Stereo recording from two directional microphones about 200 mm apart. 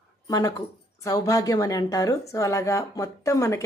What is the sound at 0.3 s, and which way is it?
A woman's voice, 20° left (ahead or behind).